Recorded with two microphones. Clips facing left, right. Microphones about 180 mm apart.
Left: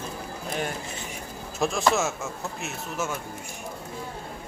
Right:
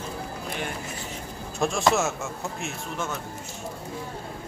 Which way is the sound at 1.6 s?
Centre (ahead or behind).